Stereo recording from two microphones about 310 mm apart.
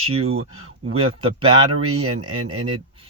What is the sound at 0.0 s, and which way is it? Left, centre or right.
Speech, centre.